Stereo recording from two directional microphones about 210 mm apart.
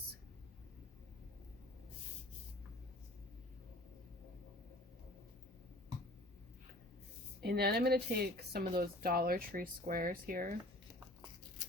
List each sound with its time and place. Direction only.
7.4 s a woman's voice: 50° right (ahead or behind)